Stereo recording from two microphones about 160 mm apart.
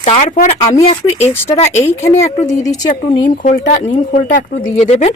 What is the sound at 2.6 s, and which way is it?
Speech, 25° left (ahead or behind).